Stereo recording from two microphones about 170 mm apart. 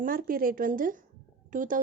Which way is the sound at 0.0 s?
55° right (ahead or behind).